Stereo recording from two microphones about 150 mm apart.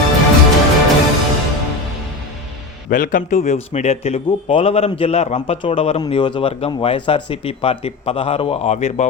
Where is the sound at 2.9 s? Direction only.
65° left (ahead or behind).